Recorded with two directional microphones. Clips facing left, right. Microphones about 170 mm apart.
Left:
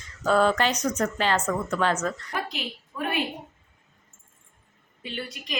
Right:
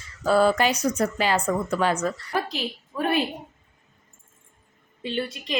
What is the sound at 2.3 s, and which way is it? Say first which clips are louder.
Speech: right 5 dB; 35° right (ahead or behind).